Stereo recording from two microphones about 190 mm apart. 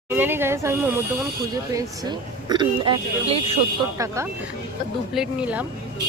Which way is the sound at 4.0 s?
15° right (ahead or behind).